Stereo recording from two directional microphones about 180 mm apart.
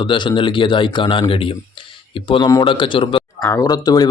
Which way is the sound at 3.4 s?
15° left (ahead or behind).